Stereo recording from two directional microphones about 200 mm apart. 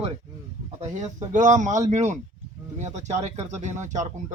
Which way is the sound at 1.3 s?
40° right (ahead or behind).